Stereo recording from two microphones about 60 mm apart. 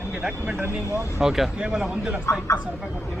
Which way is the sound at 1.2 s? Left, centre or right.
Centre.